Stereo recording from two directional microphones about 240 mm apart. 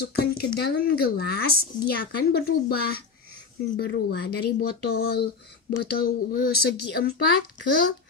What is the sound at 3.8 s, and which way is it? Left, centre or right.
Speech, left.